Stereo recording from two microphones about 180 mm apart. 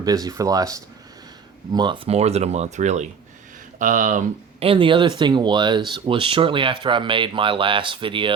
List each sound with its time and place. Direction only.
0.0 s speech: 20° right (ahead or behind); by 4.2 s 45° right (ahead or behind)
4.6 s speech: 30° right (ahead or behind)